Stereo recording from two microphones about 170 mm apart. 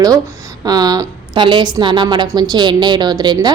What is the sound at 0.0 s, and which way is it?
A woman's voice, 20° right (ahead or behind).